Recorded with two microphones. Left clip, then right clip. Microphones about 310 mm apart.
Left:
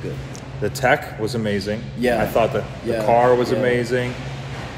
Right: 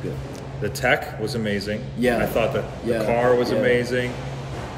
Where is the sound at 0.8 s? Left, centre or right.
Centre.